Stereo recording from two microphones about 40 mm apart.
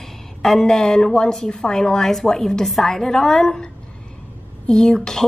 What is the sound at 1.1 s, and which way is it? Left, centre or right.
A woman's voice, centre.